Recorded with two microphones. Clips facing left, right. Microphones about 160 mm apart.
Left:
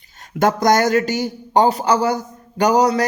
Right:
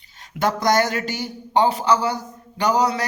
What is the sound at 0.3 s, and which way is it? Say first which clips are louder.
Speech: left 4 dB; 45° left (ahead or behind).